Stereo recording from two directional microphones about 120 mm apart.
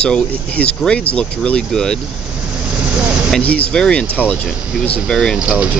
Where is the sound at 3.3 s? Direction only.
10° left (ahead or behind).